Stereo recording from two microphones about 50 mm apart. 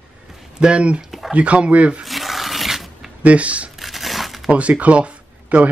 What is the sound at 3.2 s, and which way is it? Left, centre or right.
Speech, right.